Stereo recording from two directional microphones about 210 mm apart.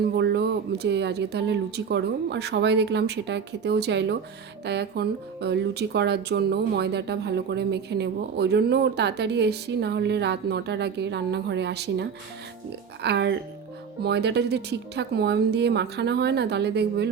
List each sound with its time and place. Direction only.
0.0 s speech: 50° right (ahead or behind)